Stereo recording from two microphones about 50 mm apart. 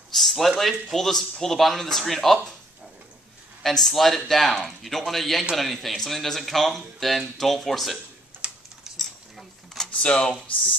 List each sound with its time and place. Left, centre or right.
0.1 s a sound: centre
0.6 s speech: centre
3.6 s speech: centre
8.9 s cutlery: centre
10.0 s speech: centre